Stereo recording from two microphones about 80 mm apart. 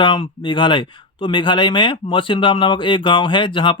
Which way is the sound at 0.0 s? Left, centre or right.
Left.